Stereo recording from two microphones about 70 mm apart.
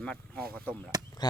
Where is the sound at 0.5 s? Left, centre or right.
Left.